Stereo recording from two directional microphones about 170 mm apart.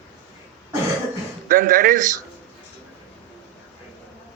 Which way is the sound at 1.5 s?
55° right (ahead or behind).